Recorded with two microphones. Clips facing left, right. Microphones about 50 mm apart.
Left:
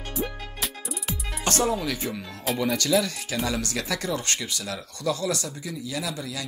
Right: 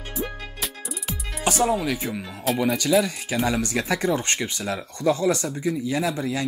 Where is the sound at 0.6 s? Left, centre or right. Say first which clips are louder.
Left 2 dB; centre.